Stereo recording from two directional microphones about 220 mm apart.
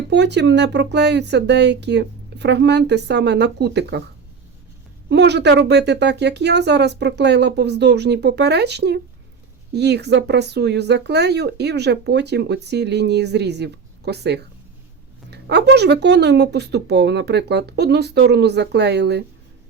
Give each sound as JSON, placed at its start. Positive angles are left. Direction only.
{"t": 0.1, "sound": "speech", "side_deg": -50}
{"t": 5.0, "sound": "speech", "side_deg": -50}